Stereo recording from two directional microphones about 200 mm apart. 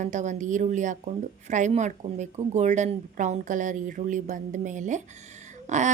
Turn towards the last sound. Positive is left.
turn(degrees=-35)  # may be behind; listen again after turning